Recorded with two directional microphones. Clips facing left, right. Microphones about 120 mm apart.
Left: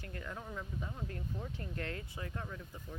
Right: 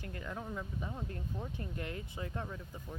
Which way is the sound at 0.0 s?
20° right (ahead or behind).